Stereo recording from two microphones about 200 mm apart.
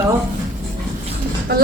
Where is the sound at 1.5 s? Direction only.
50° right (ahead or behind).